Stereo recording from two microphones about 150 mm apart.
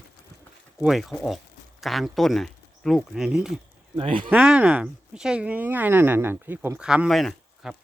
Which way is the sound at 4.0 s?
35° right (ahead or behind).